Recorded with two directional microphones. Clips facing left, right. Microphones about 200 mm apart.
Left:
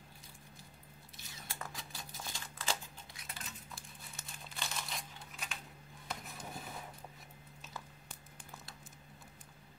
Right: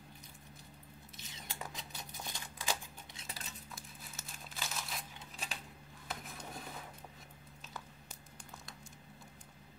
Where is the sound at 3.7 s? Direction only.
Centre (ahead or behind).